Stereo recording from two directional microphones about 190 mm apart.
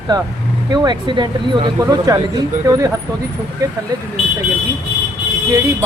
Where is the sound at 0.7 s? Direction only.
25° right (ahead or behind).